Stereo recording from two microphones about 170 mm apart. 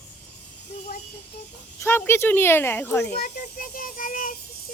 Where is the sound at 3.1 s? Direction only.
60° left (ahead or behind).